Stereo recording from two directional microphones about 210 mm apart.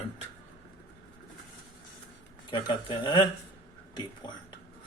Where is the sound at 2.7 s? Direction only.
25° left (ahead or behind).